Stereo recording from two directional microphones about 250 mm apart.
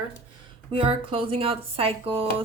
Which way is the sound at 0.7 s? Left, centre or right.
Right.